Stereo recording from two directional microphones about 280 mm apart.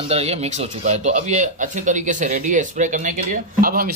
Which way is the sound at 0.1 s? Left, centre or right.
Right.